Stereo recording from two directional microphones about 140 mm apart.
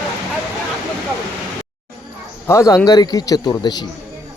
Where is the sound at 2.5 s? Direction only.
25° left (ahead or behind).